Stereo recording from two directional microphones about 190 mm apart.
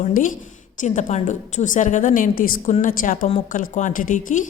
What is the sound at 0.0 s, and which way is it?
A woman's voice, 45° left (ahead or behind).